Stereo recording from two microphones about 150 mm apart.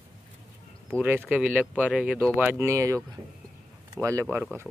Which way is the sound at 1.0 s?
10° right (ahead or behind).